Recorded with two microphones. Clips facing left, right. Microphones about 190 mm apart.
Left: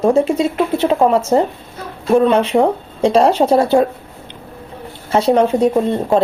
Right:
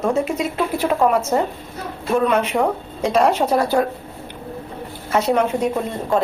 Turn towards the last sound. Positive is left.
turn(degrees=30)  # may be behind; listen again after turning